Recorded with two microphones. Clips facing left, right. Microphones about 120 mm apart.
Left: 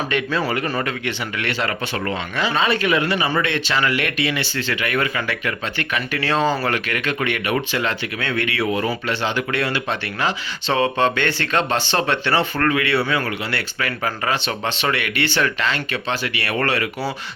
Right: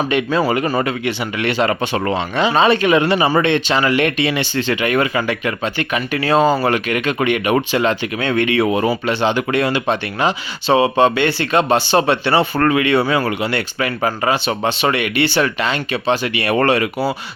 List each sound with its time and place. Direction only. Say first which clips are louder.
0.1 s speech: right 5 dB; 20° right (ahead or behind)
0.9 s speech: right 5 dB; 15° right (ahead or behind)
13.4 s speech: right 6 dB; 20° right (ahead or behind)